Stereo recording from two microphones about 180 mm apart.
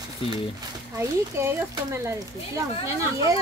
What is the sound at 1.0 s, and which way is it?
A woman's voice, 15° right (ahead or behind).